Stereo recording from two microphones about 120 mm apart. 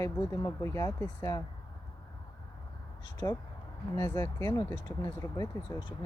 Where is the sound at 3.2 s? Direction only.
25° left (ahead or behind).